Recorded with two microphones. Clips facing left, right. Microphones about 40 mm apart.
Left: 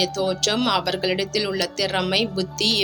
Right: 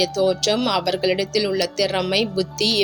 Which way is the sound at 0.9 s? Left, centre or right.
Centre.